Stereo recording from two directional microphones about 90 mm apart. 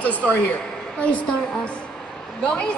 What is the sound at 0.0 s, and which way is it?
Speech, 15° left (ahead or behind).